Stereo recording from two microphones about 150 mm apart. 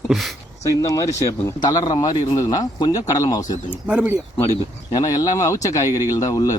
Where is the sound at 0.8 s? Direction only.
20° left (ahead or behind).